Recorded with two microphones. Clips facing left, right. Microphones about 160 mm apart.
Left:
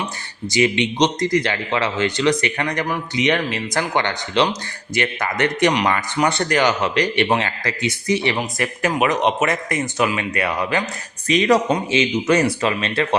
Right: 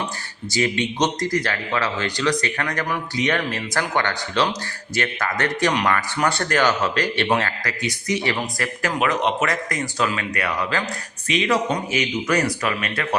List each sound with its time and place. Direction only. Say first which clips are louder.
1.0 s speech: left 4 dB; 20° left (ahead or behind)
11.3 s speech: left 5 dB; 40° left (ahead or behind)
11.9 s speech: left 5 dB; 25° left (ahead or behind)